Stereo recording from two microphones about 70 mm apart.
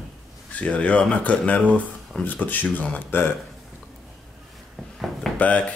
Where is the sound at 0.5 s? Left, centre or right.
Centre.